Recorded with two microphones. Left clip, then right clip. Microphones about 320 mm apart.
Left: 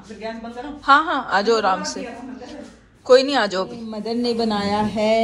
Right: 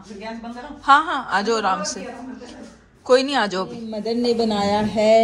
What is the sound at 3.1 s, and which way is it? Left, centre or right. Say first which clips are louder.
Speech: left 2 dB; centre.